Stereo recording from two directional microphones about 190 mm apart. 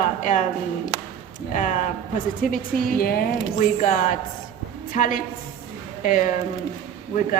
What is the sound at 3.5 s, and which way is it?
A woman's voice, 40° left (ahead or behind).